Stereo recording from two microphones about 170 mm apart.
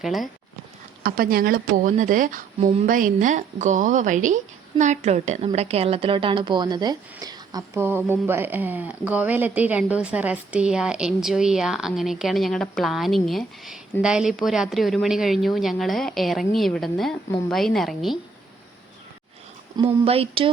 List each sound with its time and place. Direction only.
0.0 s a woman's voice: centre (ahead or behind)
1.0 s a woman's voice: 60° right (ahead or behind); by 18.2 s centre (ahead or behind)
19.7 s speech: 35° right (ahead or behind)